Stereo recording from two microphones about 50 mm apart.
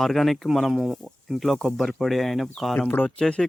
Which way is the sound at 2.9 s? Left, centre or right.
Left.